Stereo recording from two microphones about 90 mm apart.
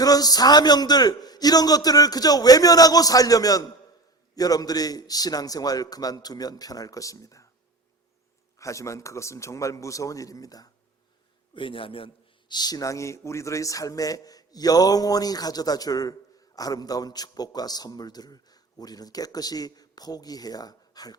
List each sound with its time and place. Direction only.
0.0 s a man's voice: 45° left (ahead or behind)
8.5 s a man's voice: 35° left (ahead or behind)
11.5 s a man's voice: 75° left (ahead or behind)
12.5 s a man's voice: 45° left (ahead or behind)